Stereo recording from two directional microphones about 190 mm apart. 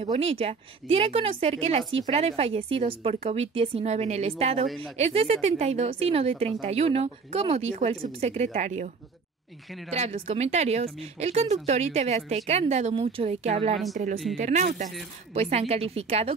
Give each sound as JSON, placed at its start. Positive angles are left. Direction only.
{"t": 0.0, "sound": "a woman's voice", "side_deg": -35}